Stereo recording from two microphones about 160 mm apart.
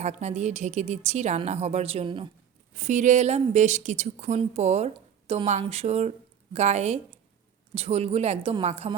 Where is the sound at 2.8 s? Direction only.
50° right (ahead or behind).